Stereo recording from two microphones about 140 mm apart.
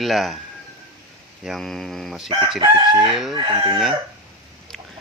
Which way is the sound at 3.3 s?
35° right (ahead or behind).